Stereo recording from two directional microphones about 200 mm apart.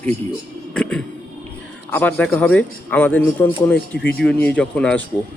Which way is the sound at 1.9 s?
10° left (ahead or behind).